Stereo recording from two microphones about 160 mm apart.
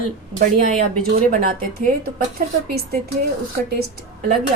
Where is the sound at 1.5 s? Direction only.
65° right (ahead or behind).